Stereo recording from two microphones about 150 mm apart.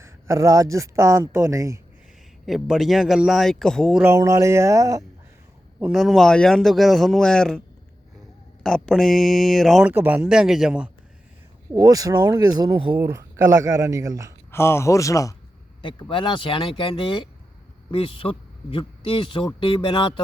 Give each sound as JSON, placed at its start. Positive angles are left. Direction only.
{"t": 0.0, "sound": "speech", "side_deg": -20}
{"t": 2.5, "sound": "a man's voice", "side_deg": 0}
{"t": 4.0, "sound": "speech", "side_deg": -20}
{"t": 5.8, "sound": "a man's voice", "side_deg": 0}
{"t": 8.6, "sound": "a man's voice", "side_deg": 0}
{"t": 9.9, "sound": "a man's voice", "side_deg": -15}
{"t": 11.7, "sound": "speech", "side_deg": -25}
{"t": 14.5, "sound": "speech", "side_deg": 15}
{"t": 15.8, "sound": "speech", "side_deg": 35}